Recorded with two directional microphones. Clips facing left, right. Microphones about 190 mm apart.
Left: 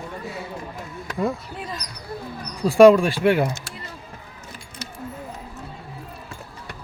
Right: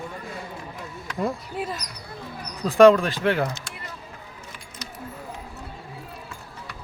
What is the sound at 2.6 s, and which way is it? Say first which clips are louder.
Speech: left 2 dB; 15° left (ahead or behind).